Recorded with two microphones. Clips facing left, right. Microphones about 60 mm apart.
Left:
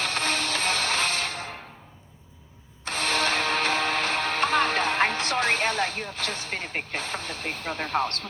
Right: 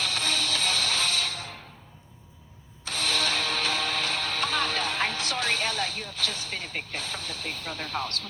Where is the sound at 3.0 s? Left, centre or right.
Left.